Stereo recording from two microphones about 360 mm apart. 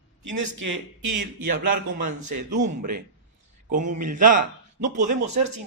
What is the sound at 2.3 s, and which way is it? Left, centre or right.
Speech, right.